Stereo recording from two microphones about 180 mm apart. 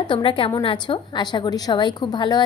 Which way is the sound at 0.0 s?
25° left (ahead or behind).